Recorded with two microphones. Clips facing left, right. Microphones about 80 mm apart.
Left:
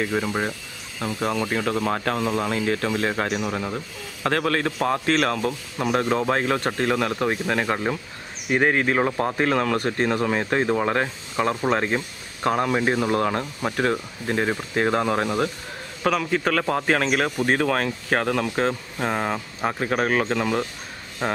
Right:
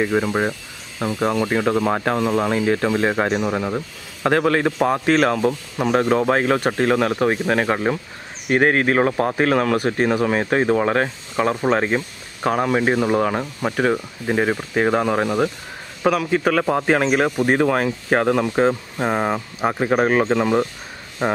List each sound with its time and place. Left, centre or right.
0.0 s a man's voice: centre